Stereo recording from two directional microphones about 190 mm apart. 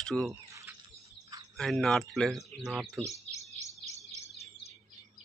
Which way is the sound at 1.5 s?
Centre (ahead or behind).